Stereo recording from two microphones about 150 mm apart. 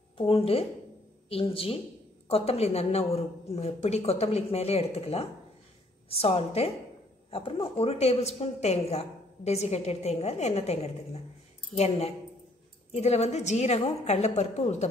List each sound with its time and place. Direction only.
0.2 s a woman's voice: 40° left (ahead or behind)